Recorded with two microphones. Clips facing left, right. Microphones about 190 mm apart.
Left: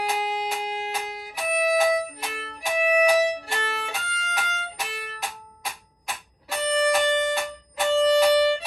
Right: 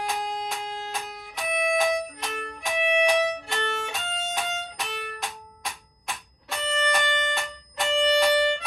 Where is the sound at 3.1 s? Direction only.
30° left (ahead or behind).